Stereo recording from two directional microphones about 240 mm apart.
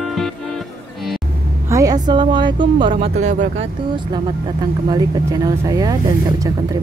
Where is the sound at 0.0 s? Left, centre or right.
Centre.